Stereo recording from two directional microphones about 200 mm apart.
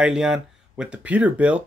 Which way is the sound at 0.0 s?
5° right (ahead or behind).